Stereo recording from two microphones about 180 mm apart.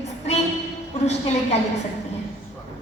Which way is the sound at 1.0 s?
35° left (ahead or behind).